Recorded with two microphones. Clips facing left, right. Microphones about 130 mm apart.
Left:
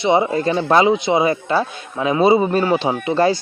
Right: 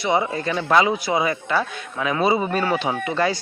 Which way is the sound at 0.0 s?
25° left (ahead or behind).